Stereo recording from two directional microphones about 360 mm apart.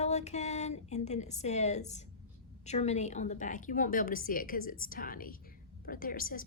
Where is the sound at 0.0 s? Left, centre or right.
Centre.